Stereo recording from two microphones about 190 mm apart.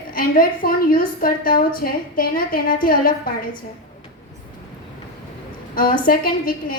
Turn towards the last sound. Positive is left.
turn(degrees=50)  # may be behind; listen again after turning